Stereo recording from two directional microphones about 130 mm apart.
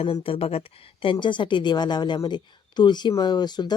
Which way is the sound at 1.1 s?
35° left (ahead or behind).